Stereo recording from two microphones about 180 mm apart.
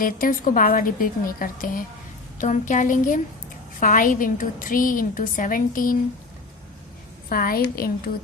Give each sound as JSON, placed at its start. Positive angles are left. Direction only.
{"t": 0.0, "sound": "a woman's voice", "side_deg": 50}
{"t": 7.3, "sound": "a woman's voice", "side_deg": 55}